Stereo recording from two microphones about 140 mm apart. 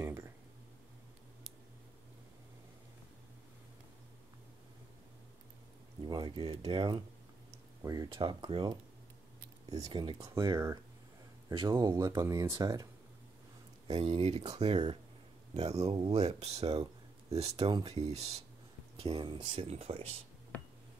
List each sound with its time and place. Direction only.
0.0 s a sound: 20° right (ahead or behind)
6.0 s speech: 30° right (ahead or behind)
13.8 s speech: 45° right (ahead or behind)